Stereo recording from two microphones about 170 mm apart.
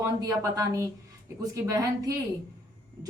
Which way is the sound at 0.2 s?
20° right (ahead or behind).